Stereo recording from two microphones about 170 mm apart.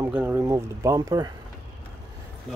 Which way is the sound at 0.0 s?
15° right (ahead or behind).